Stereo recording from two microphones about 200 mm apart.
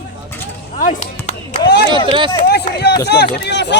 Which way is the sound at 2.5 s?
55° left (ahead or behind).